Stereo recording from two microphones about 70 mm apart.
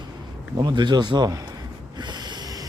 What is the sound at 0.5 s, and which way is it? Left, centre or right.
A man's voice, right.